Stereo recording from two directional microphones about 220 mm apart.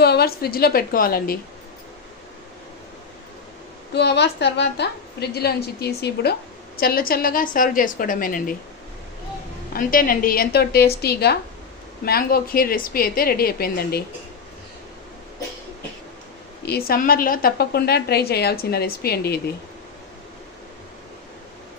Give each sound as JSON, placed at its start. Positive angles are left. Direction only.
{"t": 0.0, "sound": "a woman's voice", "side_deg": 45}
{"t": 3.9, "sound": "a woman's voice", "side_deg": 50}
{"t": 9.7, "sound": "a woman's voice", "side_deg": 40}
{"t": 16.6, "sound": "a woman's voice", "side_deg": 45}